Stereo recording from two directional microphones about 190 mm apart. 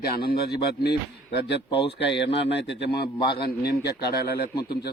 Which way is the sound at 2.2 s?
30° left (ahead or behind).